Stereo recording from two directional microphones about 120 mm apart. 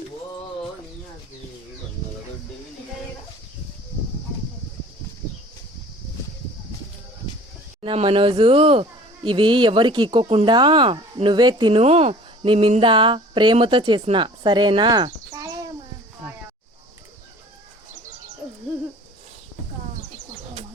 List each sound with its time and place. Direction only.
7.8 s speech: 50° right (ahead or behind)
11.8 s speech: 60° right (ahead or behind)
12.5 s speech: 50° right (ahead or behind); by 15.7 s 30° right (ahead or behind)